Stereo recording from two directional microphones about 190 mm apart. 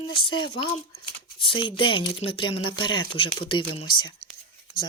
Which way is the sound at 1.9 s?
25° left (ahead or behind).